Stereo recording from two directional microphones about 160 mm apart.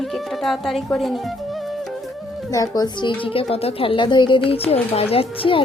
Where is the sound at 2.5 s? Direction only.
25° left (ahead or behind).